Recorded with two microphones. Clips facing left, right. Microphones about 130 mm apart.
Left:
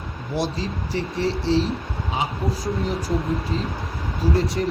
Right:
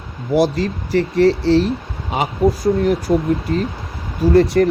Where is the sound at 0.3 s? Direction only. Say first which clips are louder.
Right 10 dB; 70° right (ahead or behind).